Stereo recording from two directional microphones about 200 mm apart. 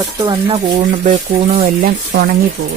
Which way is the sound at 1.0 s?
35° right (ahead or behind).